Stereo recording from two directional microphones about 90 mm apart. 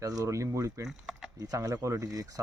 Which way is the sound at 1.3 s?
40° right (ahead or behind).